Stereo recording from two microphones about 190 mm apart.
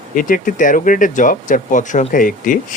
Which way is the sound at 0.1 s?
45° left (ahead or behind).